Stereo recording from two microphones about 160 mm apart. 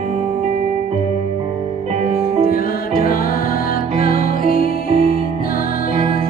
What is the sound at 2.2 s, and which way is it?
Music, 65° left (ahead or behind).